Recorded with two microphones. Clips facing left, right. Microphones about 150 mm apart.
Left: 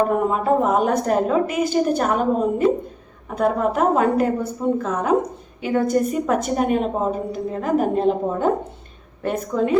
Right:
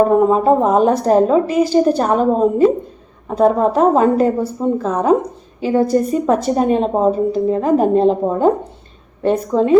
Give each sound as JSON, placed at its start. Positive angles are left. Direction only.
{"t": 0.3, "sound": "a woman's voice", "side_deg": -30}